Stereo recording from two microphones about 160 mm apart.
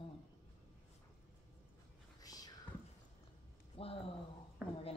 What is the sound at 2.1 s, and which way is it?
Whispering, 25° left (ahead or behind).